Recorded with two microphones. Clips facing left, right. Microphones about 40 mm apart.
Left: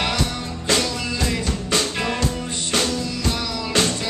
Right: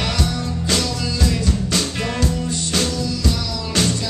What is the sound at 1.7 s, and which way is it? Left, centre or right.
Music, centre.